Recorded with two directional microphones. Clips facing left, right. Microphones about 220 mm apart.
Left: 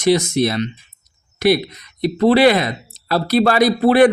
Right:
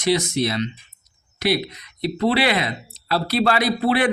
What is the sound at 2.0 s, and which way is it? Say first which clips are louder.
Speech: left 7 dB; 45° left (ahead or behind).